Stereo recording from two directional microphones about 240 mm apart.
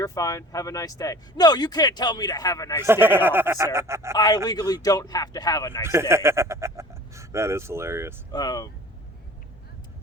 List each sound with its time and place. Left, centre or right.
0.0 s speech: centre
2.8 s speech: centre
4.1 s speech: centre
5.8 s speech: centre
8.3 s speech: centre